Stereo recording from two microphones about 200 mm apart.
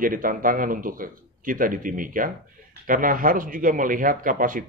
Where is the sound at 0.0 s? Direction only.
45° right (ahead or behind).